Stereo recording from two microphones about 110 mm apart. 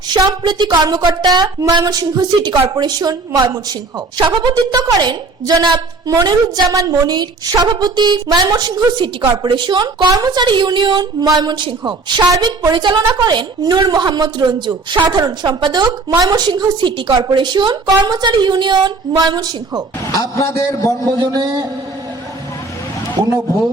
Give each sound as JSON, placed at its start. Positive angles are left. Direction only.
{"t": 0.2, "sound": "a woman's voice", "side_deg": -40}
{"t": 4.2, "sound": "a woman's voice", "side_deg": -45}
{"t": 20.1, "sound": "a man's voice", "side_deg": 30}
{"t": 21.0, "sound": "a woman's voice", "side_deg": -35}
{"t": 23.1, "sound": "a man's voice", "side_deg": -35}